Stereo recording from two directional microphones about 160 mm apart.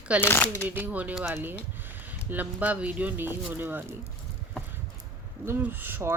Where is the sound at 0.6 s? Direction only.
10° right (ahead or behind).